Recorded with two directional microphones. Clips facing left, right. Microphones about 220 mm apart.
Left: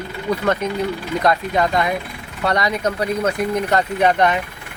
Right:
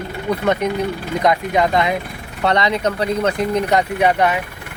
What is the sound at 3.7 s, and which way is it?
Speech, 10° right (ahead or behind).